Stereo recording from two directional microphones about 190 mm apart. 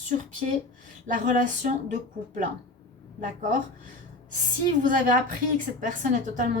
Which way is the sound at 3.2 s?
45° right (ahead or behind).